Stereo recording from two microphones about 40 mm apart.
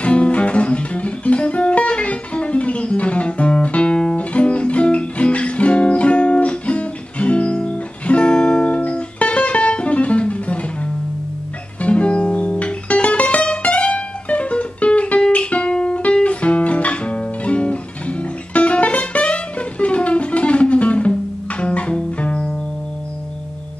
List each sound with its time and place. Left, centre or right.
0.0 s music: left
15.3 s guitar: left
21.5 s music: left